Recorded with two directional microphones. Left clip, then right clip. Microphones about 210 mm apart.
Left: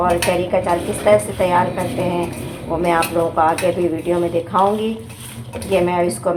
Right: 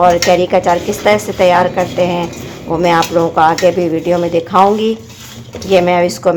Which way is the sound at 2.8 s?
55° right (ahead or behind).